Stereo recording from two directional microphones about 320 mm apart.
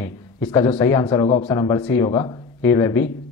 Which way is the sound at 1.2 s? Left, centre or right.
Left.